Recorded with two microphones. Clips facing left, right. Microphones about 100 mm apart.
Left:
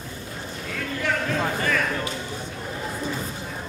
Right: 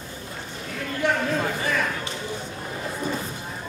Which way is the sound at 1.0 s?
20° right (ahead or behind).